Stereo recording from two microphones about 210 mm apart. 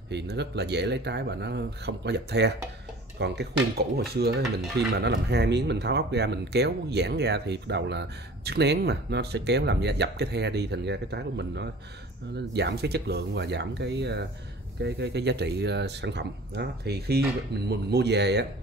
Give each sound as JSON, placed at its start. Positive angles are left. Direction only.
{"t": 0.1, "sound": "speech", "side_deg": -50}